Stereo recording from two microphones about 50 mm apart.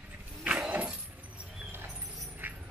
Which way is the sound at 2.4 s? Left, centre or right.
Right.